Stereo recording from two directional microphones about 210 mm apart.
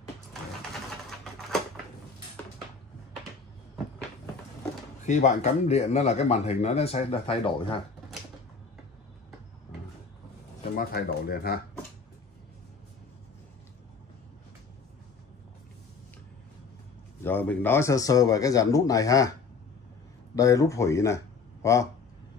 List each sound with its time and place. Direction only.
5.0 s speech: 35° left (ahead or behind)
10.8 s speech: 45° left (ahead or behind)
17.2 s a man's voice: 10° left (ahead or behind)
20.3 s a man's voice: 15° left (ahead or behind)